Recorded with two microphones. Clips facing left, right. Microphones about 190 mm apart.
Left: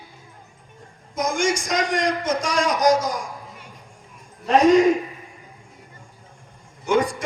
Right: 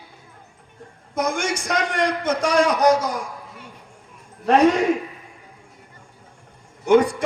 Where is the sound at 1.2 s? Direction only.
60° right (ahead or behind).